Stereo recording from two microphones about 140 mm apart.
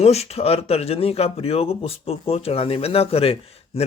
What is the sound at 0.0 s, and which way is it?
A man's voice, 50° left (ahead or behind).